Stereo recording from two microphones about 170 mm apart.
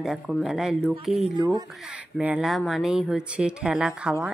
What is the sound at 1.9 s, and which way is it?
Speech, 10° right (ahead or behind).